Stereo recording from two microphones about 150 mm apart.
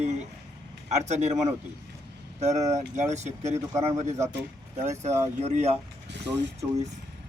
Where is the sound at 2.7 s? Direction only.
50° right (ahead or behind).